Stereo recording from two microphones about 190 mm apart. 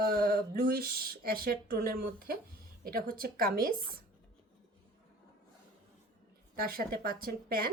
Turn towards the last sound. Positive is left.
turn(degrees=-50)  # may be behind; listen again after turning